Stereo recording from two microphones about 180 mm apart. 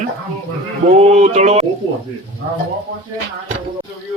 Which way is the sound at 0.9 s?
35° right (ahead or behind).